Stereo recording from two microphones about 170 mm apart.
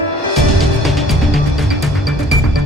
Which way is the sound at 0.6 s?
Centre (ahead or behind).